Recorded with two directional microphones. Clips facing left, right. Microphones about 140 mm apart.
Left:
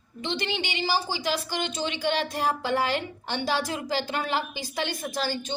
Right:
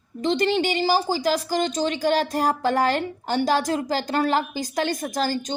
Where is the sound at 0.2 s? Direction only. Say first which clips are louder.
Right 9 dB; 40° right (ahead or behind).